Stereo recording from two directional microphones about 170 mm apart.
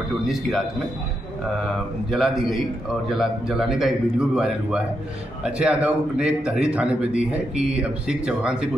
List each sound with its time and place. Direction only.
0.3 s a man's voice: centre (ahead or behind)
2.0 s a man's voice: centre (ahead or behind)